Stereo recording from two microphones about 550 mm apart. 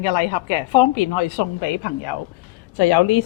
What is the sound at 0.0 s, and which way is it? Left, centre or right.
A woman's voice, left.